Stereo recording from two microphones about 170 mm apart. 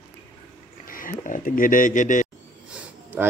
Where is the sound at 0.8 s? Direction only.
55° left (ahead or behind).